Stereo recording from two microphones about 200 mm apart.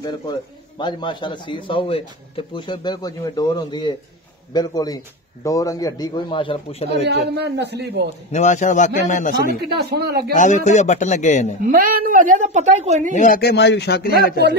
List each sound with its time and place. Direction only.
0.0 s a man's voice: 20° left (ahead or behind)
7.1 s a man's voice: 55° right (ahead or behind)
8.3 s a man's voice: 35° left (ahead or behind)
9.6 s speech: 55° right (ahead or behind)
10.3 s a man's voice: 40° left (ahead or behind)
11.7 s a woman's voice: 45° right (ahead or behind)
13.1 s speech: 40° left (ahead or behind)